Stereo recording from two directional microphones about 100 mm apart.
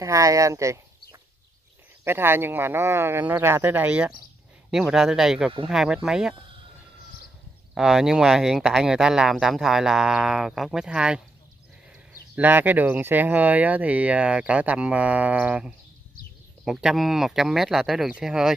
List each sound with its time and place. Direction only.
0.0 s speech: 35° right (ahead or behind)
2.0 s speech: 25° right (ahead or behind); by 6.3 s 5° right (ahead or behind)
7.7 s speech: 5° right (ahead or behind)
12.4 s speech: 20° right (ahead or behind)